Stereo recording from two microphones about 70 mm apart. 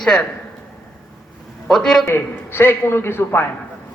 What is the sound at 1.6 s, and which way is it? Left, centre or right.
Speech, centre.